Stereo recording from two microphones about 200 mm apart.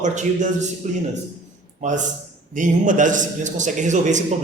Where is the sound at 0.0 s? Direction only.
35° right (ahead or behind).